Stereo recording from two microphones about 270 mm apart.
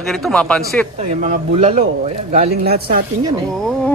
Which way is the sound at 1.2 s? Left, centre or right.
Right.